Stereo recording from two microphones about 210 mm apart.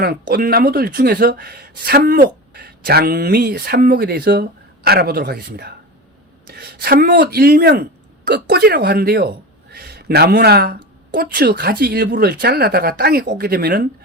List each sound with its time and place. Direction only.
0.0 s speech: 45° right (ahead or behind)